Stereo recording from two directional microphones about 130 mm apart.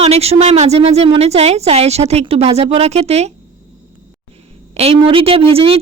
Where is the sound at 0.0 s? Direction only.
50° right (ahead or behind).